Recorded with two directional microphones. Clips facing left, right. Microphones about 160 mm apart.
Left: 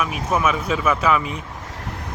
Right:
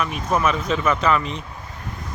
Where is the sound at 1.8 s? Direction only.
75° left (ahead or behind).